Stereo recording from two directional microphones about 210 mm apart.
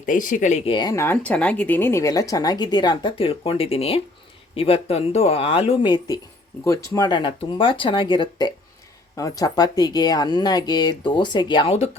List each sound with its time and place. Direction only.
0.0 s speech: 40° left (ahead or behind)